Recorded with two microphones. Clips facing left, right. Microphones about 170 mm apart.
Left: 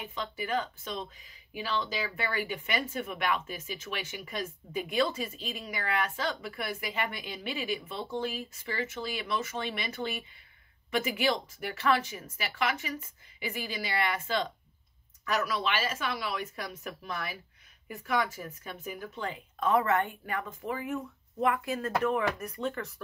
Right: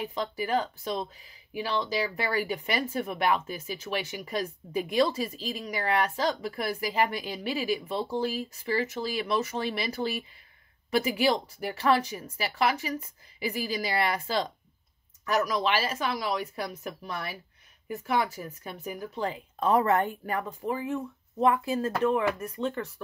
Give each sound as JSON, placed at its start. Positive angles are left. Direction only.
{"t": 0.0, "sound": "speech", "side_deg": -35}
{"t": 2.1, "sound": "speech", "side_deg": -35}